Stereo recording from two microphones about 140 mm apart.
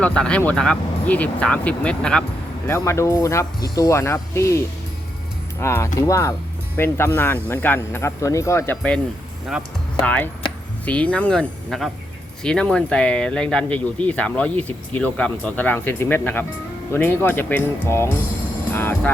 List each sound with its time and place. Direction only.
0.0 s speech: 5° left (ahead or behind)
2.6 s speech: 20° left (ahead or behind)
10.0 s speech: 10° left (ahead or behind)